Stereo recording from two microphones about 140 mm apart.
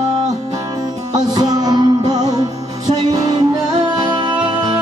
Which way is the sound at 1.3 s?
30° right (ahead or behind).